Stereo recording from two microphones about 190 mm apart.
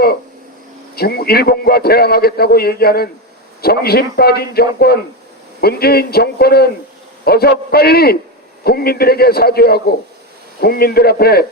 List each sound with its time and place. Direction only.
0.9 s a man's voice: 55° left (ahead or behind)